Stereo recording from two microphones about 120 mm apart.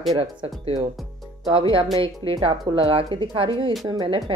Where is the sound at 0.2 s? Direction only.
50° right (ahead or behind).